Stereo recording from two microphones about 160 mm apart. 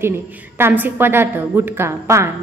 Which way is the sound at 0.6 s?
15° right (ahead or behind).